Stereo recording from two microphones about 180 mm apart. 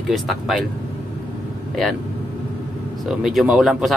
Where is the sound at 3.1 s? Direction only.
Centre (ahead or behind).